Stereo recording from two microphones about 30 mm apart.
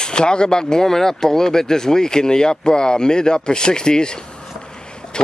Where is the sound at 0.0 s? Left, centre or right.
Left.